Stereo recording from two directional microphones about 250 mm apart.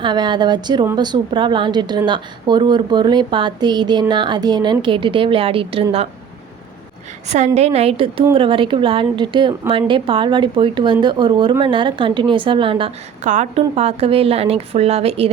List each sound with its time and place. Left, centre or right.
0.0 s a woman's voice: centre
7.3 s a woman's voice: right